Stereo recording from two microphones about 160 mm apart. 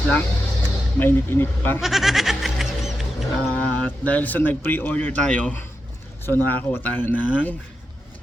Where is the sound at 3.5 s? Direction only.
10° left (ahead or behind).